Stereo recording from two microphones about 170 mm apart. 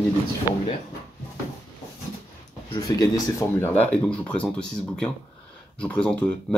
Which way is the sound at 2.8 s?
20° left (ahead or behind).